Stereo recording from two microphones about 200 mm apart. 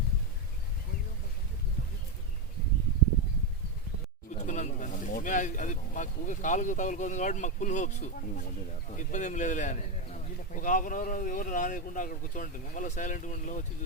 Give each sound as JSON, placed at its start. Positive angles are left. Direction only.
{"t": 4.4, "sound": "a man's voice", "side_deg": 35}